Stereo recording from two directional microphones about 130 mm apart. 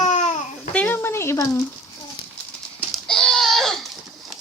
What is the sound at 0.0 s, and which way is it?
Babbling, 65° left (ahead or behind).